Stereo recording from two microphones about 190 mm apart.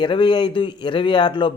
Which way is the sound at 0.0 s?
25° left (ahead or behind).